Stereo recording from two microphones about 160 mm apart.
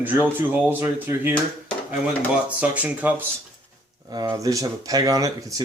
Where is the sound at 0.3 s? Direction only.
10° right (ahead or behind).